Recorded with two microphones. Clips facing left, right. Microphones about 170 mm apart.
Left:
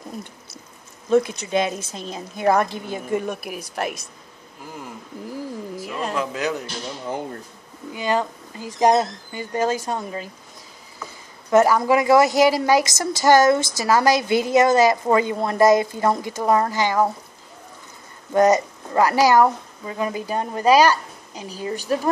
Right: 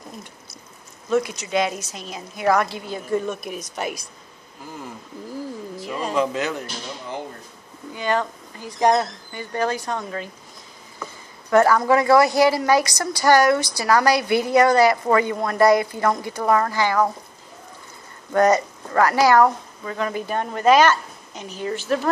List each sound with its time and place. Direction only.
1.1 s a woman's voice: 25° left (ahead or behind); by 4.0 s centre (ahead or behind)
5.3 s speech: 5° left (ahead or behind)
7.9 s a woman's voice: 15° left (ahead or behind)
11.5 s a woman's voice: 20° left (ahead or behind)
18.3 s a woman's voice: 20° left (ahead or behind)
20.7 s a woman's voice: 35° left (ahead or behind)
21.6 s a woman's voice: 15° left (ahead or behind)